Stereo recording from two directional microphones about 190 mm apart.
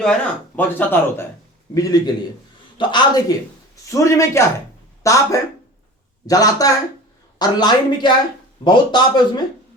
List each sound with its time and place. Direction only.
0.0 s speech: 5° left (ahead or behind); by 9.4 s 25° left (ahead or behind)